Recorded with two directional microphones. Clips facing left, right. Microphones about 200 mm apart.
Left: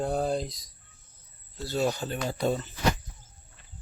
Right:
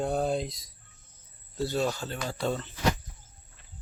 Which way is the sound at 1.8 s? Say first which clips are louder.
Left 3 dB; 15° left (ahead or behind).